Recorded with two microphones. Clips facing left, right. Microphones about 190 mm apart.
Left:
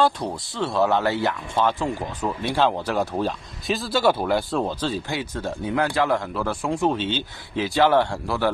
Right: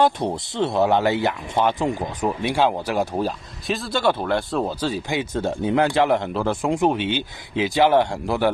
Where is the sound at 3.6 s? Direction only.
Centre (ahead or behind).